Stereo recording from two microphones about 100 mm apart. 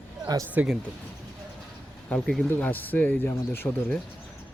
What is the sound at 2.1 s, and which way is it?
Speech, 5° left (ahead or behind).